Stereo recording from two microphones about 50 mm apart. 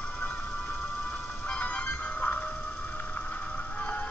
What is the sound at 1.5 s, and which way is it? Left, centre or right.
Music, left.